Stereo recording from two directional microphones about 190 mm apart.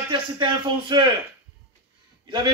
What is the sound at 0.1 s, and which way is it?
Speech, 25° right (ahead or behind).